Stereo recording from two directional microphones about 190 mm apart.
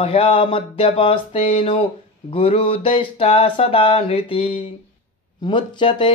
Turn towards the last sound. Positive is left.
turn(degrees=25)  # may be behind; listen again after turning